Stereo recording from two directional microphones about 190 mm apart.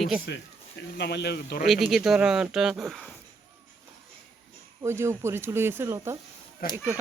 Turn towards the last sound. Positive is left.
turn(degrees=-15)  # may be behind; listen again after turning